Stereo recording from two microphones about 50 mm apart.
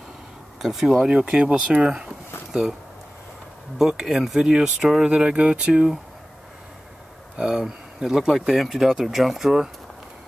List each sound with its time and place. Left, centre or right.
0.6 s speech: centre
1.0 s speech: centre
3.7 s speech: centre
7.3 s speech: centre